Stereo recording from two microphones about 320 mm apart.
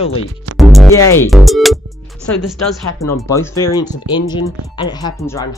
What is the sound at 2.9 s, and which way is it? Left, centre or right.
Speech, centre.